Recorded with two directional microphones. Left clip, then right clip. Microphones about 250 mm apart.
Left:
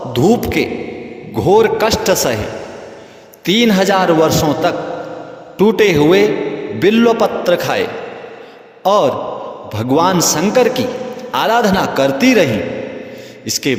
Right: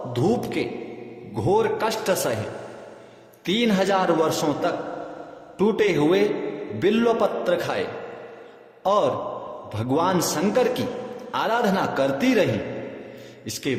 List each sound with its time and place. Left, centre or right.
0.1 s a man's voice: left
3.4 s a man's voice: left
13.5 s a man's voice: left